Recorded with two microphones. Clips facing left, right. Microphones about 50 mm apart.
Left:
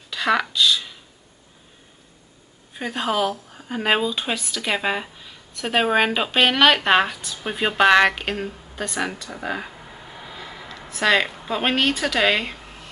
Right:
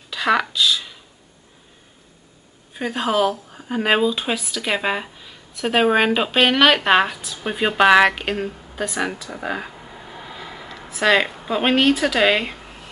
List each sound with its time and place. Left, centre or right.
0.1 s speech: centre
2.7 s speech: centre